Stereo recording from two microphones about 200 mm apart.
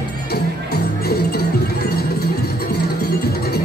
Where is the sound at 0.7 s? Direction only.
50° left (ahead or behind).